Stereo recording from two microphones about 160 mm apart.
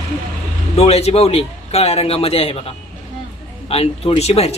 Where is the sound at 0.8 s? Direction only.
40° left (ahead or behind).